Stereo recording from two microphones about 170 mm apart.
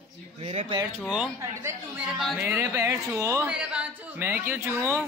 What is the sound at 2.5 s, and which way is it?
Speech, 15° right (ahead or behind).